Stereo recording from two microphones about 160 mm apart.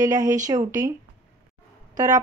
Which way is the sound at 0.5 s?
20° right (ahead or behind).